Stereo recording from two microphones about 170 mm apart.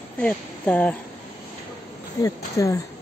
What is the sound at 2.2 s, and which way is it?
Speech, 20° left (ahead or behind).